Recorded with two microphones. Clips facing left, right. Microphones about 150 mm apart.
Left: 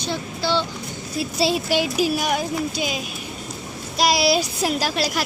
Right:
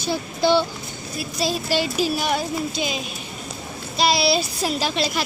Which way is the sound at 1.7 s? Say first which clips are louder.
Left 1 dB; 10° left (ahead or behind).